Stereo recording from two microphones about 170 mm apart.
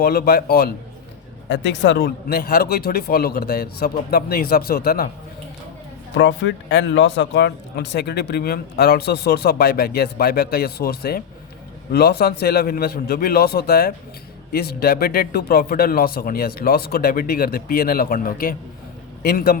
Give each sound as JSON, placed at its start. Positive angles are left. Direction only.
{"t": 0.0, "sound": "speech", "side_deg": 65}
{"t": 1.5, "sound": "speech", "side_deg": 90}
{"t": 6.1, "sound": "speech", "side_deg": 90}